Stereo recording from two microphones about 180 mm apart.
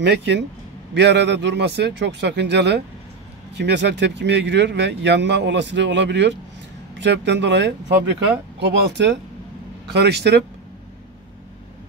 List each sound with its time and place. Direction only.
0.0 s speech: 80° right